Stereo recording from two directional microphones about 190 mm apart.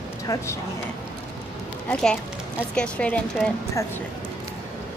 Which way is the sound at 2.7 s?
5° left (ahead or behind).